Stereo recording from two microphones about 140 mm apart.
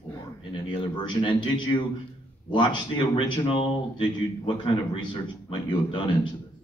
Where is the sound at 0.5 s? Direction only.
35° left (ahead or behind).